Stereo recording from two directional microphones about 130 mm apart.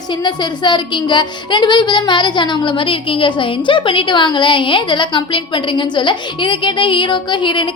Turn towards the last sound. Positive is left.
turn(degrees=35)  # may be behind; listen again after turning